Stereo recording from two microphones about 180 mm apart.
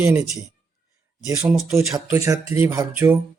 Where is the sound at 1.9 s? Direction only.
20° right (ahead or behind).